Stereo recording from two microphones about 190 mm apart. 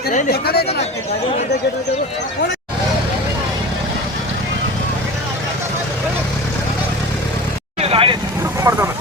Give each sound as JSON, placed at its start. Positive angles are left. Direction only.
{"t": 0.1, "sound": "speech", "side_deg": 50}
{"t": 7.8, "sound": "vehicle", "side_deg": -30}
{"t": 8.7, "sound": "speech", "side_deg": -15}